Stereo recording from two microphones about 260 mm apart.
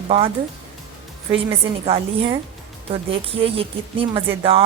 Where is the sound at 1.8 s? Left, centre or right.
Right.